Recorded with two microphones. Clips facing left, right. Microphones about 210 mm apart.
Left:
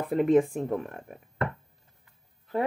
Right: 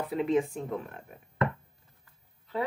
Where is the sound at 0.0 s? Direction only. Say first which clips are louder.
Left 5 dB; 50° left (ahead or behind).